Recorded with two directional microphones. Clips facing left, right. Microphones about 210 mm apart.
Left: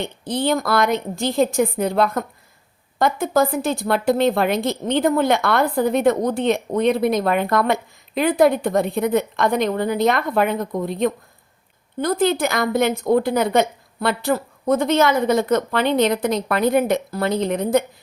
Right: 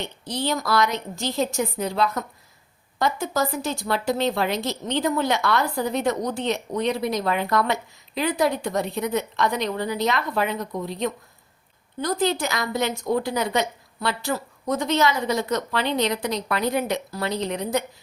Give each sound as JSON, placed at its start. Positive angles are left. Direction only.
{"t": 0.0, "sound": "a woman's voice", "side_deg": 55}